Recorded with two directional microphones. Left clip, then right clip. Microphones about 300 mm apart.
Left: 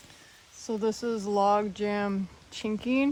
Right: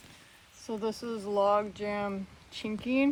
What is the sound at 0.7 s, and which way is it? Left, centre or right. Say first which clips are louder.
Speech: left 5 dB; left.